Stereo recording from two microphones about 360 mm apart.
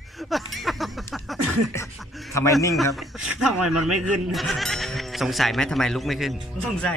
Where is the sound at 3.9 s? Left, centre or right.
Right.